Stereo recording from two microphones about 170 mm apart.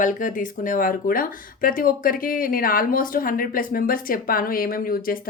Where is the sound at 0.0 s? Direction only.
50° left (ahead or behind).